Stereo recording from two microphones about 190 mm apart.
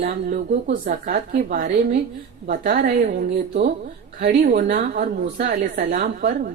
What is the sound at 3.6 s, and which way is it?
A woman's voice, 50° right (ahead or behind).